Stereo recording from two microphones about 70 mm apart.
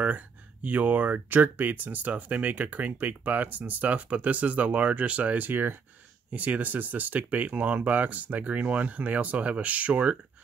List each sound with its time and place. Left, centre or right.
0.0 s speech: right